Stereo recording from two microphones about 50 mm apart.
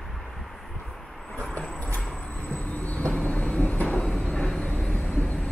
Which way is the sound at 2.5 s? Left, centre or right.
Left.